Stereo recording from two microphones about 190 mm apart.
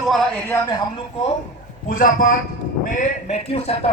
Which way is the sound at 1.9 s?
45° left (ahead or behind).